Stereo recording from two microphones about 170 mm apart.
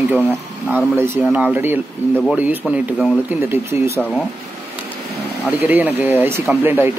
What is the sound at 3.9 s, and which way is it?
Speech, 5° left (ahead or behind).